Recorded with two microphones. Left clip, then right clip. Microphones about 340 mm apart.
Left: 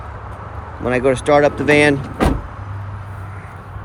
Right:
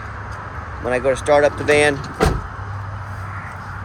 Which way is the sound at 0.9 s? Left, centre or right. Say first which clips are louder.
Left 2 dB; left.